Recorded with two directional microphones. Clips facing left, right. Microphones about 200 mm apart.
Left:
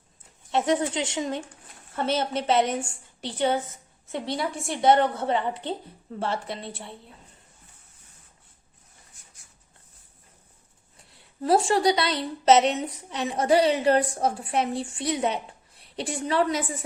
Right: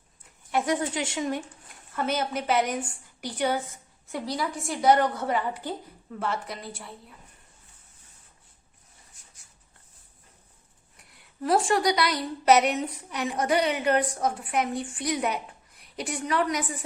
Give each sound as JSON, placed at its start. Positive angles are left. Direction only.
{"t": 0.5, "sound": "a woman's voice", "side_deg": 25}
{"t": 10.9, "sound": "a woman's voice", "side_deg": 25}